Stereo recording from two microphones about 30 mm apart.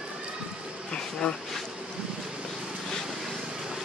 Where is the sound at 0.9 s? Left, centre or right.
Left.